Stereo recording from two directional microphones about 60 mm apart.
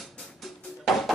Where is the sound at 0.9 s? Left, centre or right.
Centre.